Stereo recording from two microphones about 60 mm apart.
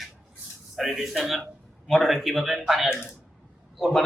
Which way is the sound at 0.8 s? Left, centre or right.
Centre.